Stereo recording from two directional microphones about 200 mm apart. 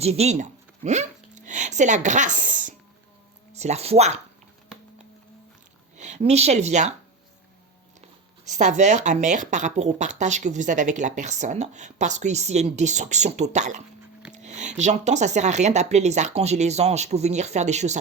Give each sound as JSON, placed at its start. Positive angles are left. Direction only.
{"t": 0.0, "sound": "a sound", "side_deg": -30}
{"t": 3.5, "sound": "speech", "side_deg": -35}
{"t": 6.0, "sound": "speech", "side_deg": -35}
{"t": 8.4, "sound": "speech", "side_deg": -35}